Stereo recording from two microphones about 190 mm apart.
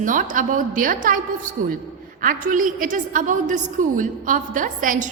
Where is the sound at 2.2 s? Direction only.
45° right (ahead or behind).